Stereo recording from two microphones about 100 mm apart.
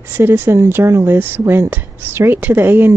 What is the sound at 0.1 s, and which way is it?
Speech, 20° right (ahead or behind).